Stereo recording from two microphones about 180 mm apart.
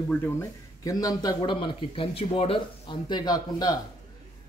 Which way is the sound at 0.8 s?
20° left (ahead or behind).